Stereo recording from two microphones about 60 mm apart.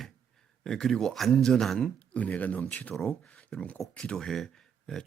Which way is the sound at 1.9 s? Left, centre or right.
Left.